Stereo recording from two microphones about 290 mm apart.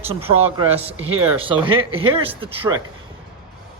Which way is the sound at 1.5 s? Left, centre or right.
Centre.